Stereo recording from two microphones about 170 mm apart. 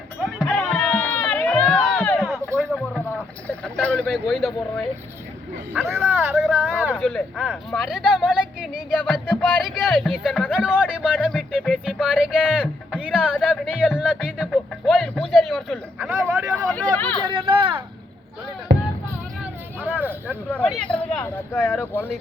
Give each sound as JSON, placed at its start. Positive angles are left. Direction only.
{"t": 0.3, "sound": "crowd", "side_deg": 5}
{"t": 2.7, "sound": "a sound", "side_deg": 5}
{"t": 5.7, "sound": "speech", "side_deg": -15}
{"t": 6.9, "sound": "speech", "side_deg": 0}
{"t": 11.2, "sound": "music", "side_deg": 5}
{"t": 11.5, "sound": "speech", "side_deg": 0}
{"t": 13.0, "sound": "music", "side_deg": -5}
{"t": 13.3, "sound": "speech", "side_deg": 5}
{"t": 16.0, "sound": "speech", "side_deg": -15}
{"t": 16.6, "sound": "speech", "side_deg": 10}
{"t": 17.2, "sound": "speech", "side_deg": -30}
{"t": 18.7, "sound": "music", "side_deg": -90}
{"t": 19.4, "sound": "vehicle", "side_deg": -10}
{"t": 20.5, "sound": "speech", "side_deg": 10}